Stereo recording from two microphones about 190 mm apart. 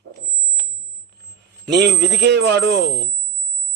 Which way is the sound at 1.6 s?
65° right (ahead or behind).